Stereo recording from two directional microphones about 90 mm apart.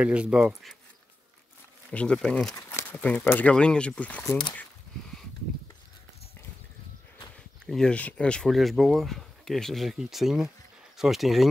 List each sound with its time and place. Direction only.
0.0 s speech: 10° right (ahead or behind)
1.9 s speech: 10° left (ahead or behind)
2.9 s speech: 15° left (ahead or behind)
7.3 s speech: 5° left (ahead or behind)